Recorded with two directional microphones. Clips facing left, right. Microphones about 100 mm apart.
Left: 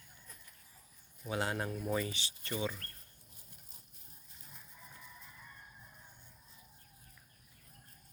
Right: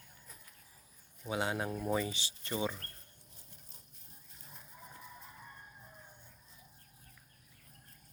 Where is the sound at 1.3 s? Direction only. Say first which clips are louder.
Right 1 dB; 10° right (ahead or behind).